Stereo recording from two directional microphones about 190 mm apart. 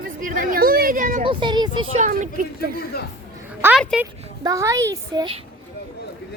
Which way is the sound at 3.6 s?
10° right (ahead or behind).